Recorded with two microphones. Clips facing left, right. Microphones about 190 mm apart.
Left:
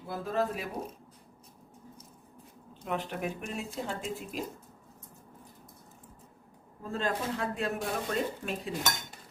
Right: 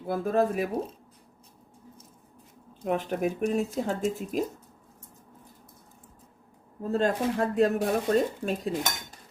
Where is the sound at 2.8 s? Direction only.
45° right (ahead or behind).